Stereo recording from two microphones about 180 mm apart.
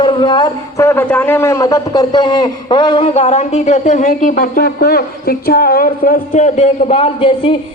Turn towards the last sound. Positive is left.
turn(degrees=30)  # may be behind; listen again after turning